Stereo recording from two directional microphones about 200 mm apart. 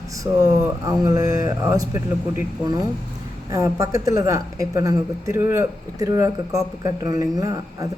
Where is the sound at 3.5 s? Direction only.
15° right (ahead or behind).